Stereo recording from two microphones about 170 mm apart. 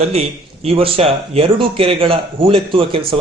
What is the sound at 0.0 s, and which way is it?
Speech, 40° right (ahead or behind).